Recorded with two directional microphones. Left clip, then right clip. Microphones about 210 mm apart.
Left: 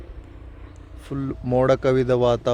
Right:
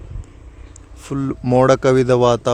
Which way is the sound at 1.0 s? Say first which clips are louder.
Right 6 dB; 30° right (ahead or behind).